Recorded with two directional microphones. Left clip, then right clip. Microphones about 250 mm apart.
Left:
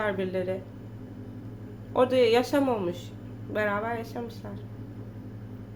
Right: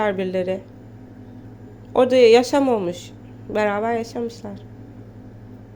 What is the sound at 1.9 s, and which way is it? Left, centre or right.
A woman's voice, right.